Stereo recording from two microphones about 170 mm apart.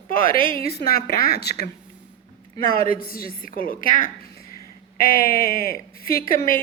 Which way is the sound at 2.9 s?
60° left (ahead or behind).